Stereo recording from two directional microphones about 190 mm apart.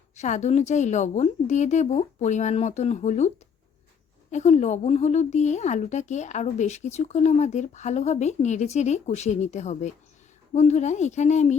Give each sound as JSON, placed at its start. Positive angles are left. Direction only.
{"t": 0.2, "sound": "speech", "side_deg": 40}